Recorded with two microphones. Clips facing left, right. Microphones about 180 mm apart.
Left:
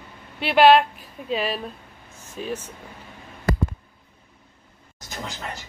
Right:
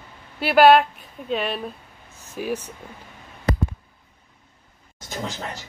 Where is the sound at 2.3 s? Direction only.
10° right (ahead or behind).